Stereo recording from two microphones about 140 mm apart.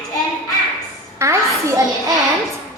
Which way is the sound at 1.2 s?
20° right (ahead or behind).